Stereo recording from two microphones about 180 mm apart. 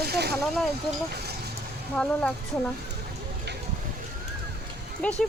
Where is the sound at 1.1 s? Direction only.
65° right (ahead or behind).